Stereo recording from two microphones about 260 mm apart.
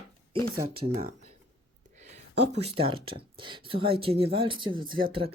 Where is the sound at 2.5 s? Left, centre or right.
Right.